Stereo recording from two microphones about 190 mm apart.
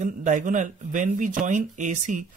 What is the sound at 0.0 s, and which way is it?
Speech, 40° right (ahead or behind).